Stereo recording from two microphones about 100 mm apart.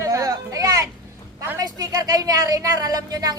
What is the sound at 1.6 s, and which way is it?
A woman's voice, 40° right (ahead or behind).